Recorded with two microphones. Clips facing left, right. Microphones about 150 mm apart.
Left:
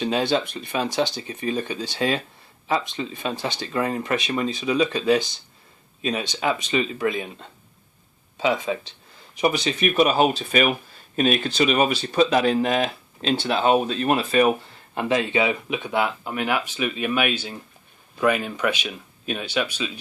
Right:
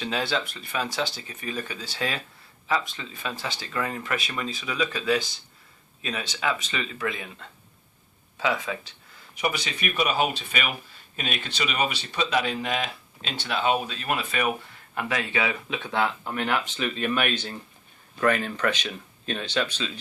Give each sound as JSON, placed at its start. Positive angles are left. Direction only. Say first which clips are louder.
{"t": 0.0, "sound": "speech", "louder": "left 6 dB", "side_deg": 20}
{"t": 9.4, "sound": "speech", "louder": "left 7 dB", "side_deg": 35}
{"t": 14.9, "sound": "speech", "louder": "left 6 dB", "side_deg": 25}